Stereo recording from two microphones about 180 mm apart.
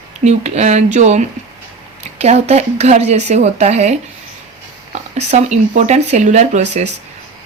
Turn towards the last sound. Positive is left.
turn(degrees=-40)  # may be behind; listen again after turning